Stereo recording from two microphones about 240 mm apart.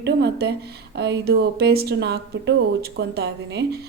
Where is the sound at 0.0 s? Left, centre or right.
Right.